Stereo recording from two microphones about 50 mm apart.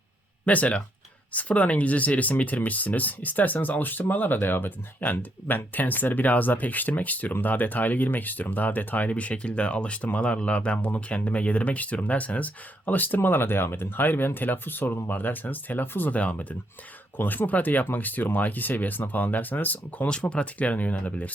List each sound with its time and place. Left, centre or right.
0.4 s speech: left
16.1 s speech: left
20.3 s speech: left